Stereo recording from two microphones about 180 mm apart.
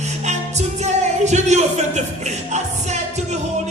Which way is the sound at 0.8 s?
40° right (ahead or behind).